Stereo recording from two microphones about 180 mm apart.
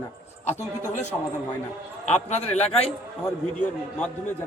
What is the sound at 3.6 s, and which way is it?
Speech, 10° left (ahead or behind).